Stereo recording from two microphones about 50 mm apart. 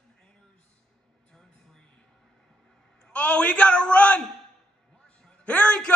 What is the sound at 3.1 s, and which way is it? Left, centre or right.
A man's voice, left.